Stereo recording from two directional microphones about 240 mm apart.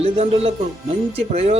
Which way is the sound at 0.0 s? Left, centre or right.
Right.